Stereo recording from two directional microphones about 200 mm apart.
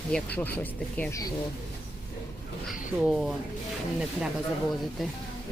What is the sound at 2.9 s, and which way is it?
Speech, centre (ahead or behind).